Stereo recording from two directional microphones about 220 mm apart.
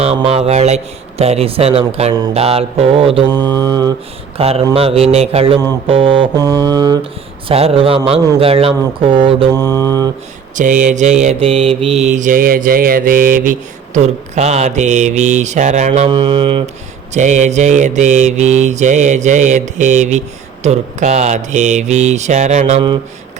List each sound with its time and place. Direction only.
0.0 s mantra: 30° right (ahead or behind)
10.5 s mantra: 35° right (ahead or behind)